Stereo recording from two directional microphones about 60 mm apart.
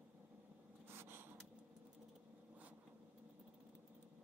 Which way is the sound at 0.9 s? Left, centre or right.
Right.